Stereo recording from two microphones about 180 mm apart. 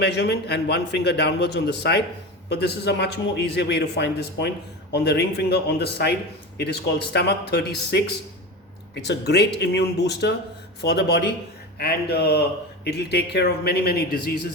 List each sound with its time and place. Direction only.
0.0 s a man's voice: 65° left (ahead or behind)